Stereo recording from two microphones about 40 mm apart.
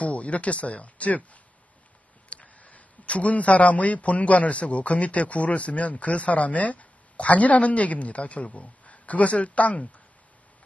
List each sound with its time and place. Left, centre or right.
0.0 s speech: left